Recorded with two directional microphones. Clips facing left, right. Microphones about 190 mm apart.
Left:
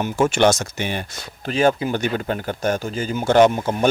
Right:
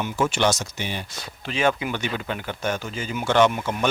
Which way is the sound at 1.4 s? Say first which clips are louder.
Left 5 dB; 40° left (ahead or behind).